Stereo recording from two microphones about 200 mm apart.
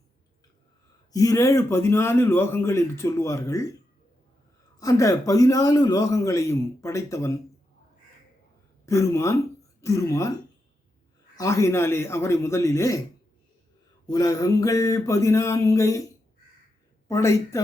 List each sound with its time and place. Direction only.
1.1 s a man's voice: 15° left (ahead or behind)
4.8 s a man's voice: 15° left (ahead or behind)
8.9 s a man's voice: 15° left (ahead or behind)
11.3 s a man's voice: 15° left (ahead or behind)
14.1 s a man's voice: 15° left (ahead or behind)
17.1 s a man's voice: 15° left (ahead or behind)